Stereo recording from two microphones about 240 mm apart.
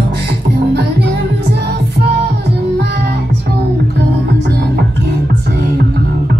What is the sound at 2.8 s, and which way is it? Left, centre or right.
Music, right.